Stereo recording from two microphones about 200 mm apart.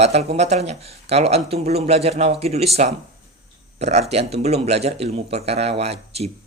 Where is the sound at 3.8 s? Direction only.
35° right (ahead or behind).